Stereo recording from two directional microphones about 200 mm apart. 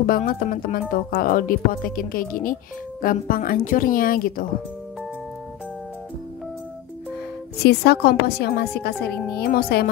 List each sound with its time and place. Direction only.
0.0 s speech: 45° left (ahead or behind)
7.6 s speech: 55° left (ahead or behind)